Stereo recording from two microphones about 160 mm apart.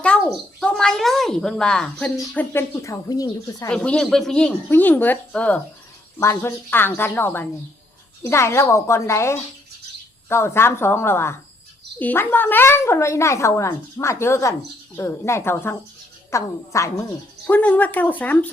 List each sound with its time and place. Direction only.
0.1 s a sound: 5° left (ahead or behind)
0.6 s a woman's voice: 5° left (ahead or behind); by 3.7 s 20° left (ahead or behind)
3.7 s a woman's voice: 5° left (ahead or behind)